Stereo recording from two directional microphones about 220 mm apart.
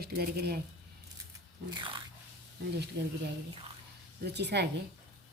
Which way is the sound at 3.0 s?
50° right (ahead or behind).